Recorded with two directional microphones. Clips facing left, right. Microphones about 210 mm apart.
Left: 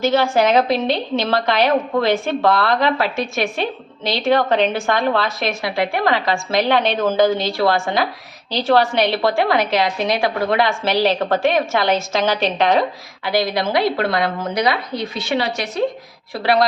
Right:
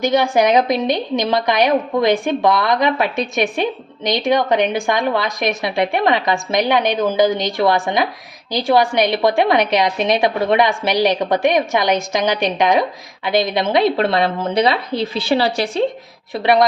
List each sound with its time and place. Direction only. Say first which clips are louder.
0.0 s a woman's voice: right 1 dB; 15° right (ahead or behind); by 15.8 s 30° right (ahead or behind)
16.3 s a woman's voice: right 2 dB; 20° right (ahead or behind)